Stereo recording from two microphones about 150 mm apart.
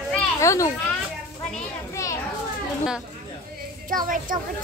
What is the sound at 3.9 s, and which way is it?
Speech, 65° right (ahead or behind).